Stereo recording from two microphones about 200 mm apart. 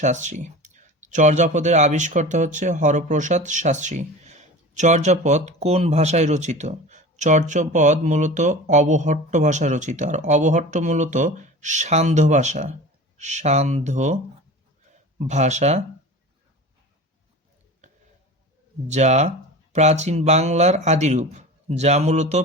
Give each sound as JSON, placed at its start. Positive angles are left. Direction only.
{"t": 0.0, "sound": "speech", "side_deg": -35}
{"t": 15.3, "sound": "speech", "side_deg": -35}
{"t": 18.9, "sound": "speech", "side_deg": -35}